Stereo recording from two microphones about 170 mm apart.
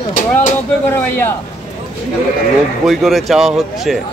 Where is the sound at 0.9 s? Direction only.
10° left (ahead or behind).